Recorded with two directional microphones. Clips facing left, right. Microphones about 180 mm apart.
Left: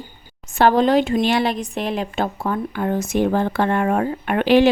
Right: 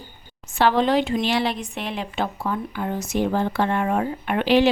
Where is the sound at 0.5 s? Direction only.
45° left (ahead or behind).